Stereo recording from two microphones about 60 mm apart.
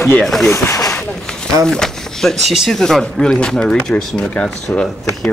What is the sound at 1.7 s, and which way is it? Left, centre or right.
Speech, centre.